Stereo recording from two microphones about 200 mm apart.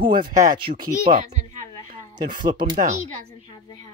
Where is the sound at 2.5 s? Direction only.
20° right (ahead or behind).